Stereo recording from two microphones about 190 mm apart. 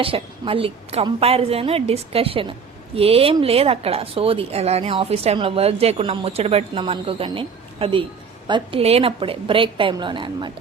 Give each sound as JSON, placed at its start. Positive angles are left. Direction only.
{"t": 0.0, "sound": "a woman's voice", "side_deg": -30}